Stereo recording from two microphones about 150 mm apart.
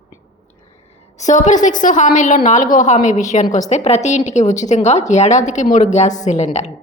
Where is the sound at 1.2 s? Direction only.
55° left (ahead or behind).